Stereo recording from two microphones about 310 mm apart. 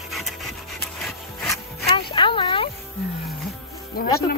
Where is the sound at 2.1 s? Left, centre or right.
Centre.